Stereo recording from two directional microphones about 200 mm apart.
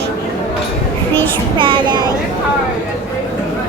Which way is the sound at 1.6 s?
25° right (ahead or behind).